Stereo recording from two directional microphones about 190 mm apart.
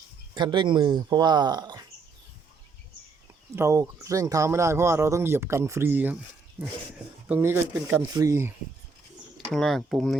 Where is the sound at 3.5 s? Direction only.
15° right (ahead or behind).